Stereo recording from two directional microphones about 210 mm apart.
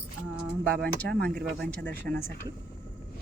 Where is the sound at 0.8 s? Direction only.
5° left (ahead or behind).